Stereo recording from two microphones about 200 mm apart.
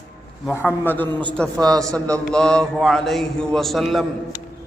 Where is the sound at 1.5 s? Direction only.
20° right (ahead or behind).